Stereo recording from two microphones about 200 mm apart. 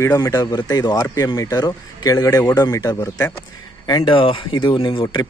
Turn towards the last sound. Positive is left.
turn(degrees=25)  # may be behind; listen again after turning